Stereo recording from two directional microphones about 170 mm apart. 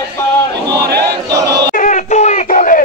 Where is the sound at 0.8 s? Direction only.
75° right (ahead or behind).